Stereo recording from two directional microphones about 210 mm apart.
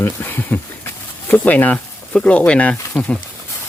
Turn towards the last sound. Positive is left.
turn(degrees=5)  # may be behind; listen again after turning